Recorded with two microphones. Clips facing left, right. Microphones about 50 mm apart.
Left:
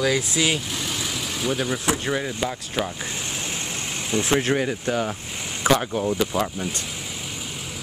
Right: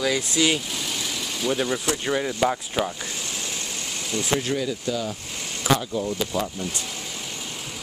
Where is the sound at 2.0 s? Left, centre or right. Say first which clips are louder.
Right 3 dB; centre.